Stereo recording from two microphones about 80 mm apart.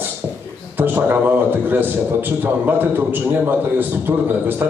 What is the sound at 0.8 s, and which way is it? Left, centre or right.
A man's voice, right.